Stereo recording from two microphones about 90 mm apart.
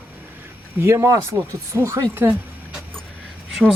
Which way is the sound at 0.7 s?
30° right (ahead or behind).